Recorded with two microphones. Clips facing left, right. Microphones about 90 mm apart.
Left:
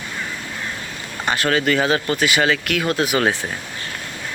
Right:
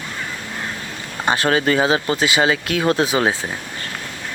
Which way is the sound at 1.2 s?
25° right (ahead or behind).